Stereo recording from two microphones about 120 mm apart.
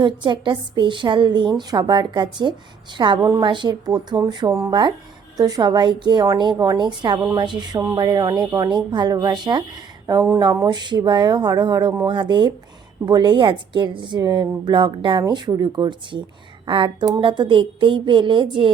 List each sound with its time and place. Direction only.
0.0 s a woman's voice: 40° right (ahead or behind)
7.8 s a woman's voice: 30° right (ahead or behind)
10.1 s speech: 25° right (ahead or behind)
10.7 s a woman's voice: 40° right (ahead or behind)